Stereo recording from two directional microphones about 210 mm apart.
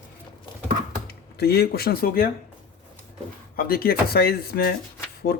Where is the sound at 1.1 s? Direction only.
50° left (ahead or behind).